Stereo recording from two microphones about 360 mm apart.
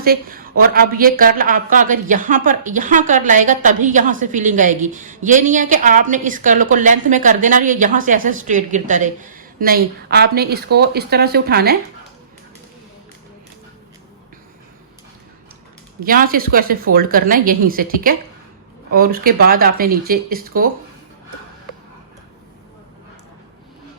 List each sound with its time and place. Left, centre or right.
0.0 s a woman's voice: right
16.0 s a woman's voice: right